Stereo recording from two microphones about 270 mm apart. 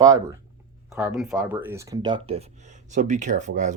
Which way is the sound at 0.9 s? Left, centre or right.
Centre.